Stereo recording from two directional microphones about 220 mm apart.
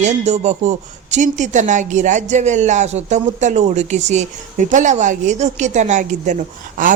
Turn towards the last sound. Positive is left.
turn(degrees=-35)  # may be behind; listen again after turning